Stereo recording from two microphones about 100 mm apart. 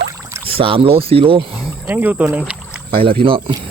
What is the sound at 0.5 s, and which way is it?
Speech, 65° right (ahead or behind).